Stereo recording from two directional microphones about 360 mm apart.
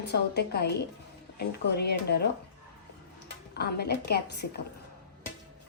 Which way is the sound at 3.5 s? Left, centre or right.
Left.